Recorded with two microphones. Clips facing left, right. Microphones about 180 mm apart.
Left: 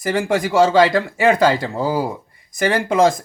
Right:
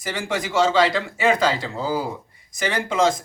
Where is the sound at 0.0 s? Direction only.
55° left (ahead or behind).